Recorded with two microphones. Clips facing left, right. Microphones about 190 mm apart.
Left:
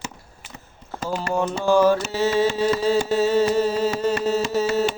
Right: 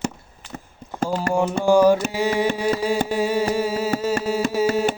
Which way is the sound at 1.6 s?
15° right (ahead or behind).